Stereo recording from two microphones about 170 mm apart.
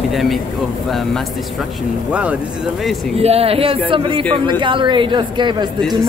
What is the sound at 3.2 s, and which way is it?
A woman's voice, 35° right (ahead or behind).